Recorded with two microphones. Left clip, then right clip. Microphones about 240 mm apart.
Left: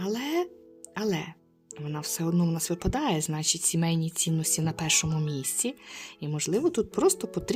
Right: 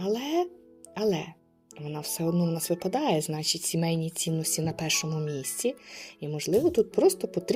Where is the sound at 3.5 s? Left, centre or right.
Left.